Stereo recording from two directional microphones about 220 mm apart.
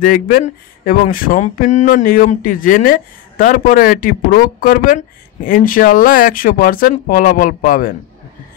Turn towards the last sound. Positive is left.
turn(degrees=40)  # may be behind; listen again after turning